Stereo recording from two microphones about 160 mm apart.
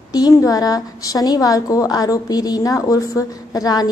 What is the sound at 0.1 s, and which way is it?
A woman's voice, 25° left (ahead or behind).